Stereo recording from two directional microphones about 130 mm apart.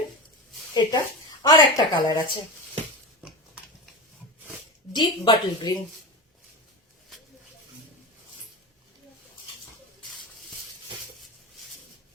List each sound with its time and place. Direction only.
0.7 s a woman's voice: 30° left (ahead or behind)
4.9 s a woman's voice: 35° left (ahead or behind)